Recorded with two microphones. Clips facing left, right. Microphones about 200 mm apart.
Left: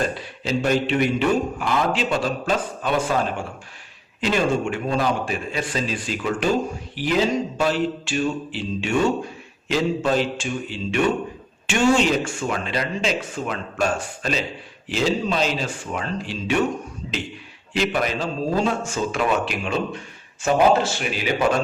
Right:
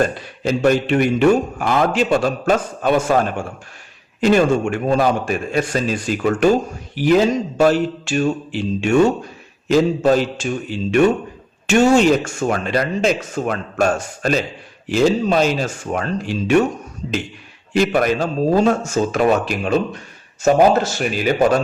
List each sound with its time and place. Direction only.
0.0 s a man's voice: 50° right (ahead or behind)
17.7 s a man's voice: 50° right (ahead or behind)